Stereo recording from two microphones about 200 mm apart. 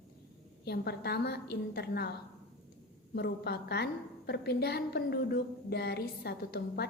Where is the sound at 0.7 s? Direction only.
55° left (ahead or behind).